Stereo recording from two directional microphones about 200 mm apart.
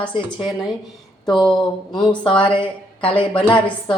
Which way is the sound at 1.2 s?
20° left (ahead or behind).